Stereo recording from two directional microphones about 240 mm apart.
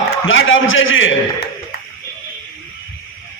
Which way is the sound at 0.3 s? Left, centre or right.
Left.